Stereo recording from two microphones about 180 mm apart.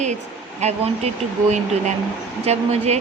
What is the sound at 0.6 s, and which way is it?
A woman's voice, 40° right (ahead or behind).